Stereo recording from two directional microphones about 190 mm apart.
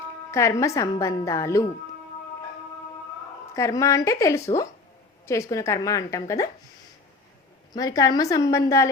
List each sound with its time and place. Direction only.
0.3 s a woman's voice: 15° left (ahead or behind)
3.5 s a woman's voice: 15° left (ahead or behind)
7.7 s a woman's voice: 20° left (ahead or behind)